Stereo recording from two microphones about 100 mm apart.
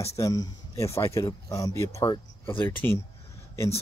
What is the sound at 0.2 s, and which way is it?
Speech, 35° left (ahead or behind).